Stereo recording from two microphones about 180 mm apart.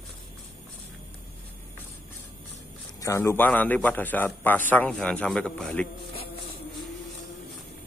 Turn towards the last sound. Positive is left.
turn(degrees=5)  # may be behind; listen again after turning